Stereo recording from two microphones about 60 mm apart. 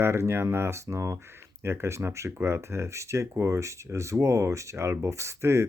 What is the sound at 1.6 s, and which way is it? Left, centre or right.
Speech, right.